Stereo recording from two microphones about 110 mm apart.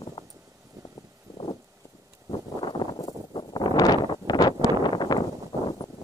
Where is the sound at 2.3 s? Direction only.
45° left (ahead or behind).